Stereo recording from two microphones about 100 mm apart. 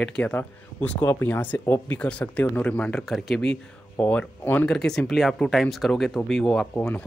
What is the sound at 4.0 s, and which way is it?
Speech, 15° left (ahead or behind).